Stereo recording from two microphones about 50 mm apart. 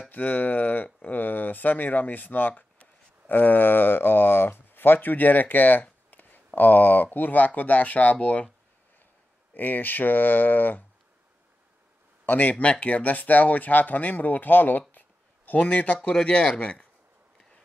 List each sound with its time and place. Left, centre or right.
0.1 s speech: left
9.5 s speech: left
12.3 s speech: left